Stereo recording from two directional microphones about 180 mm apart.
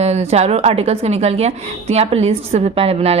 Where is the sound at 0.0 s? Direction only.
35° right (ahead or behind).